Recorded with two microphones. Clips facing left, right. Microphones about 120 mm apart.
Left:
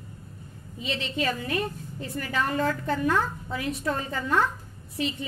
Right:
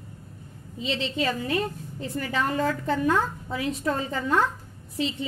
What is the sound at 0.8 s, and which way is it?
A woman's voice, 30° right (ahead or behind).